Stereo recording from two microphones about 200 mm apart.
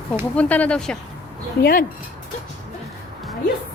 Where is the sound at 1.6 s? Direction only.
45° left (ahead or behind).